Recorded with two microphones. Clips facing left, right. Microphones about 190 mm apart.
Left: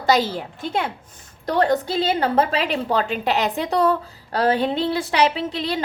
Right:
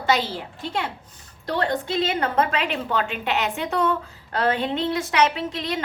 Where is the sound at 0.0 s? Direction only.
40° left (ahead or behind).